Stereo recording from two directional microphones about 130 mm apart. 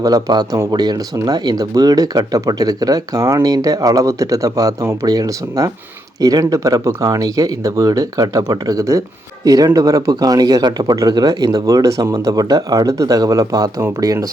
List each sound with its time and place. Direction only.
0.0 s speech: 30° right (ahead or behind)